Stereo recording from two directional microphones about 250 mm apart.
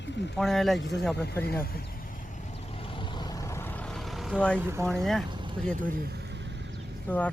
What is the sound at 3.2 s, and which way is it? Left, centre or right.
Vehicle, centre.